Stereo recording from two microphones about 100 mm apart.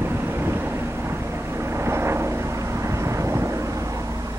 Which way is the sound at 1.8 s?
25° right (ahead or behind).